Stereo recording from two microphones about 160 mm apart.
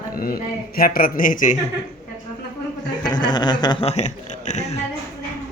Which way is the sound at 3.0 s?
25° left (ahead or behind).